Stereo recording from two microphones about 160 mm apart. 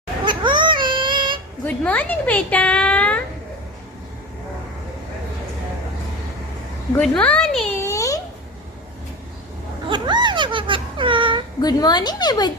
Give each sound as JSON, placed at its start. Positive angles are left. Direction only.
{"t": 0.3, "sound": "baby cry", "side_deg": -30}
{"t": 1.6, "sound": "speech", "side_deg": 10}
{"t": 6.9, "sound": "a child's voice", "side_deg": 10}
{"t": 7.8, "sound": "a sound", "side_deg": 20}
{"t": 9.9, "sound": "a sound", "side_deg": -30}
{"t": 11.6, "sound": "speech", "side_deg": 25}